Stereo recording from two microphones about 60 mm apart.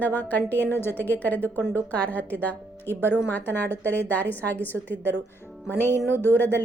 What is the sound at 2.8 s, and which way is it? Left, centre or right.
A woman's voice, left.